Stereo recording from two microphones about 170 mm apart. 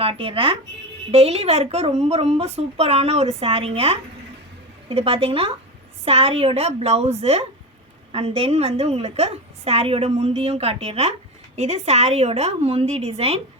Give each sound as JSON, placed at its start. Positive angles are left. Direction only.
{"t": 0.0, "sound": "a woman's voice", "side_deg": -30}
{"t": 4.9, "sound": "a woman's voice", "side_deg": -35}